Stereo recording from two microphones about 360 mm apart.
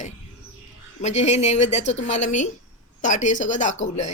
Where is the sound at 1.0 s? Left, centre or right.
Centre.